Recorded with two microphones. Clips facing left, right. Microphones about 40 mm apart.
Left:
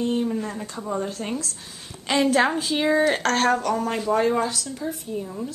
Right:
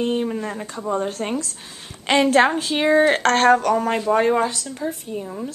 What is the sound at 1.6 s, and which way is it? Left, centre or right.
Speech, centre.